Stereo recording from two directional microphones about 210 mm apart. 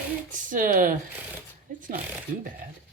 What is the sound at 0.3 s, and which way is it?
Speech, 40° right (ahead or behind).